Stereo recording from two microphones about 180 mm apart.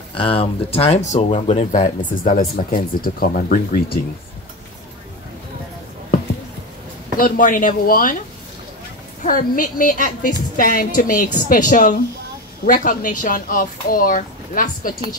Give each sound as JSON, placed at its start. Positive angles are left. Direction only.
{"t": 0.1, "sound": "speech", "side_deg": 30}
{"t": 7.2, "sound": "speech", "side_deg": 50}
{"t": 9.2, "sound": "speech", "side_deg": 50}